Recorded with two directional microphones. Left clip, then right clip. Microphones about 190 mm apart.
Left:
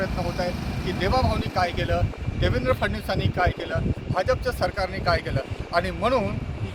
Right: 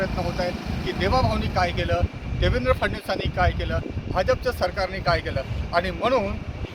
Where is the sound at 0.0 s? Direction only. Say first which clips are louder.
Right 1 dB; centre (ahead or behind).